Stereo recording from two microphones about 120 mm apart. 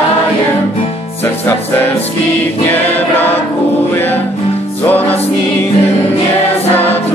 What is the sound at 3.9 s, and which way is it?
Music, 15° left (ahead or behind).